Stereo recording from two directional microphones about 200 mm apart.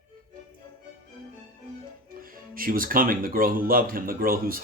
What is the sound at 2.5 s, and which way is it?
Speech, 45° right (ahead or behind).